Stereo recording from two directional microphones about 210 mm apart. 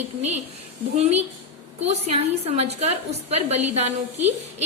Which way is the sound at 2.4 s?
30° right (ahead or behind).